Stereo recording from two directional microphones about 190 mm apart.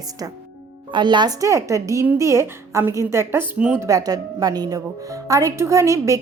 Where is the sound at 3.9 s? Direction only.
20° right (ahead or behind).